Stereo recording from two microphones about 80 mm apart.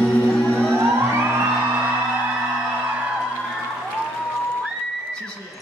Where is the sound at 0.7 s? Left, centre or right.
Right.